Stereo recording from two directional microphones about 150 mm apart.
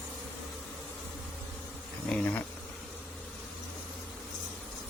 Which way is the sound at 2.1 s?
5° left (ahead or behind).